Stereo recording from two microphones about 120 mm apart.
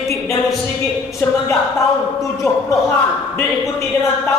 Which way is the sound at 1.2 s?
15° left (ahead or behind).